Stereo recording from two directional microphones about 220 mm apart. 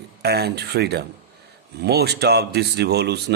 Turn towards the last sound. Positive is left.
turn(degrees=-50)  # may be behind; listen again after turning